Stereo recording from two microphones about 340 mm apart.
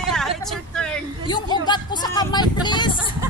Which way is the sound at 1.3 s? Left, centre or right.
Centre.